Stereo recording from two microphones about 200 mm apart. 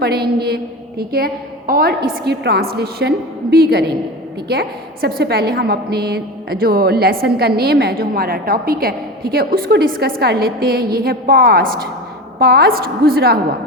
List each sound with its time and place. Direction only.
0.0 s a woman's voice: 50° right (ahead or behind)